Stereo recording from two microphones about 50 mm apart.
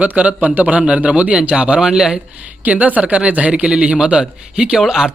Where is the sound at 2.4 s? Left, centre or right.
Right; by 5.1 s centre.